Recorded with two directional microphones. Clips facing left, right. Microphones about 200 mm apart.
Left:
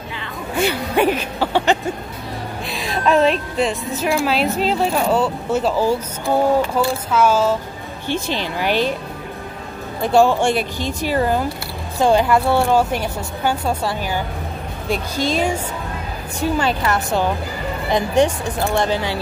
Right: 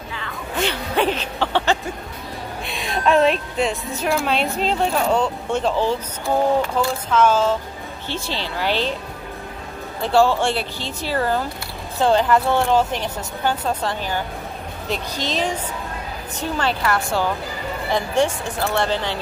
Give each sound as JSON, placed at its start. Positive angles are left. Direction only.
{"t": 0.6, "sound": "speech", "side_deg": 10}
{"t": 2.6, "sound": "a woman's voice", "side_deg": 0}
{"t": 10.0, "sound": "speech", "side_deg": 15}